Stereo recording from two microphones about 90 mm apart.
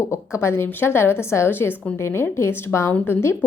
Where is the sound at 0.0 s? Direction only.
30° left (ahead or behind).